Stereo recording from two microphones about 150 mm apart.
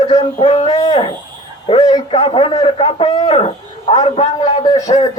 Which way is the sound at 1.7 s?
35° left (ahead or behind).